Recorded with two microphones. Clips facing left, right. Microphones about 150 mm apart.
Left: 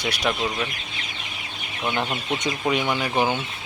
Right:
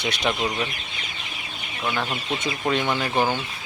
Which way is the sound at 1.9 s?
20° left (ahead or behind).